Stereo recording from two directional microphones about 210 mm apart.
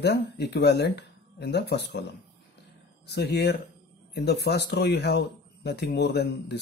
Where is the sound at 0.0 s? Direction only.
50° left (ahead or behind).